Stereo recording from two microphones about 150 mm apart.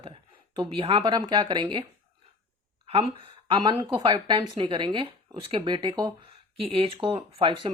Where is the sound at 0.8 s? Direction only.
35° right (ahead or behind).